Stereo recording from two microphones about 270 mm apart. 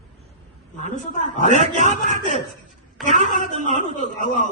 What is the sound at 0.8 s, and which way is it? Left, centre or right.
A woman's voice, left.